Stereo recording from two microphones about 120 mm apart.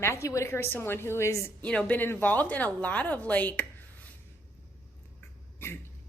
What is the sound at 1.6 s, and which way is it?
A woman's voice, 10° left (ahead or behind).